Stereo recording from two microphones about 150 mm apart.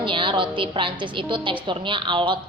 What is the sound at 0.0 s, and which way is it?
A woman's voice, 35° right (ahead or behind).